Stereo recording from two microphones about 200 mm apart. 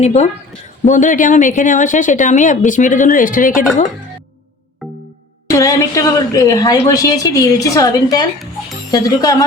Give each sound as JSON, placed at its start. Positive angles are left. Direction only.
{"t": 0.0, "sound": "speech", "side_deg": 35}
{"t": 5.5, "sound": "a woman's voice", "side_deg": 15}